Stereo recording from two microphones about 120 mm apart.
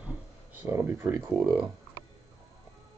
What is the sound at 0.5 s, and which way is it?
Speech, 15° right (ahead or behind).